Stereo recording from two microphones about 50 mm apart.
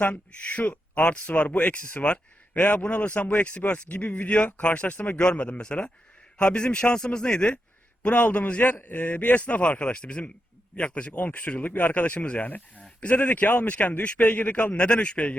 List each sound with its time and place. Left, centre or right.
0.0 s a man's voice: left
1.2 s a man's voice: left
14.5 s a man's voice: left